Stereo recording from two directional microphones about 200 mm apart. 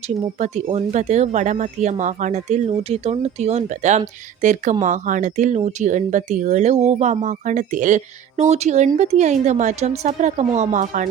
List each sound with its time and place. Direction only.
0.3 s speech: 35° right (ahead or behind)